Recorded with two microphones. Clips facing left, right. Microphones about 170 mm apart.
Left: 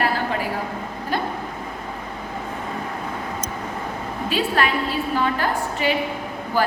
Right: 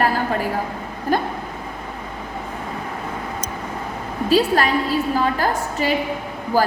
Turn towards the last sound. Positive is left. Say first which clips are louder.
# right 3 dB
turn(degrees=-40)  # may be behind; listen again after turning